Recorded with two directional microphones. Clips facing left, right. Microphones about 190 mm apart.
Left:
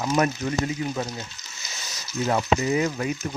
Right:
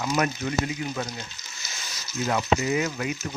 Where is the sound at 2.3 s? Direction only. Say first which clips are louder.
Left 1 dB; 30° left (ahead or behind).